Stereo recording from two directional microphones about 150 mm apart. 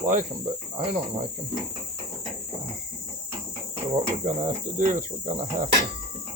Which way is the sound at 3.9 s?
50° right (ahead or behind).